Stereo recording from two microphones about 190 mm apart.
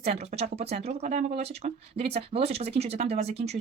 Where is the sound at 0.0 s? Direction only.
35° right (ahead or behind).